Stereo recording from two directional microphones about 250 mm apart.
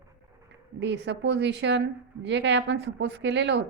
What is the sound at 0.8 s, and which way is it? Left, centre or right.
Speech, right.